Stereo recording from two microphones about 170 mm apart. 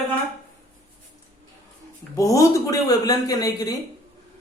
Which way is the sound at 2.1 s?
20° left (ahead or behind).